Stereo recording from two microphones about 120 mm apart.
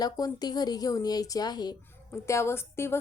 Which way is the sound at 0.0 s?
35° left (ahead or behind).